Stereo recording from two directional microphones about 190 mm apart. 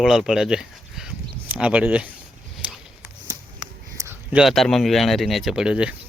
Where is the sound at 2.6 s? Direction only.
5° right (ahead or behind).